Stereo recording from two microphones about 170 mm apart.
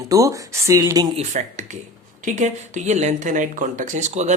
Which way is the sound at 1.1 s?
40° right (ahead or behind).